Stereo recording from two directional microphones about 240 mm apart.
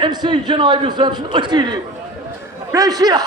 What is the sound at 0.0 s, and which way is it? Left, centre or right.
A man's voice, centre.